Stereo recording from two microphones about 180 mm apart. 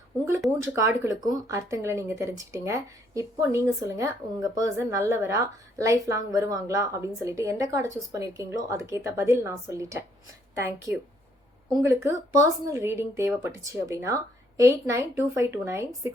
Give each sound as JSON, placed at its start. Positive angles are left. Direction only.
{"t": 0.6, "sound": "speech", "side_deg": -15}